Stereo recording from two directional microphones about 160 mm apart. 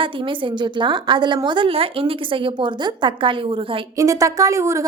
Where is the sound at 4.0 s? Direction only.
20° right (ahead or behind).